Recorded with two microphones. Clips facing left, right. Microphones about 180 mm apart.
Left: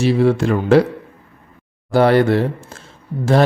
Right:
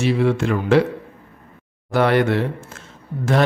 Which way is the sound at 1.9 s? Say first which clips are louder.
Left 4 dB; 35° left (ahead or behind).